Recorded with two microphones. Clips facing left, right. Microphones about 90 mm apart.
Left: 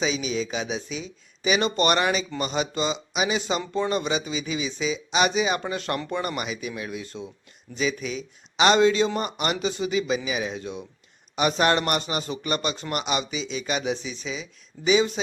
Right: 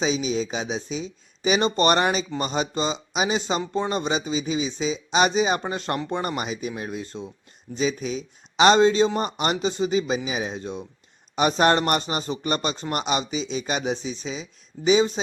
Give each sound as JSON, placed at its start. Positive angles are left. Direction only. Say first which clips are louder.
{"t": 0.0, "sound": "speech", "louder": "right 2 dB", "side_deg": -35}